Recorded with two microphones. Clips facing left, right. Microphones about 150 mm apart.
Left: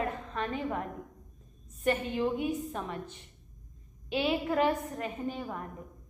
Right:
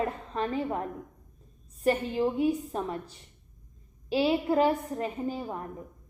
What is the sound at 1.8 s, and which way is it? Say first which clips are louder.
A woman's voice: right 3 dB; 30° right (ahead or behind).